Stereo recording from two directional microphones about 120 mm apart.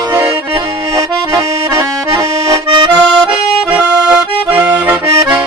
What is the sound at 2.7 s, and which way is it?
Accordion, 40° right (ahead or behind).